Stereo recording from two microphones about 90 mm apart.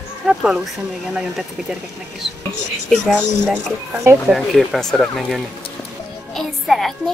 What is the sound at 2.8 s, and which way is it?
A woman's voice, centre (ahead or behind).